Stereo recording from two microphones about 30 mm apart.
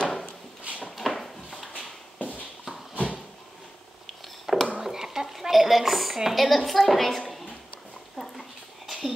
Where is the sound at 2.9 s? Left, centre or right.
Right.